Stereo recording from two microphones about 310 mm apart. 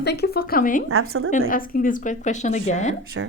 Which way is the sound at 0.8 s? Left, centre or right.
Right.